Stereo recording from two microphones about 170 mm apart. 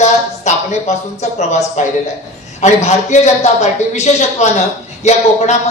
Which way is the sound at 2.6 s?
40° left (ahead or behind).